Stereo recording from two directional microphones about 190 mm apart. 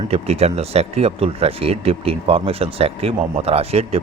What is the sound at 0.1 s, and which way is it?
Speech, 35° right (ahead or behind).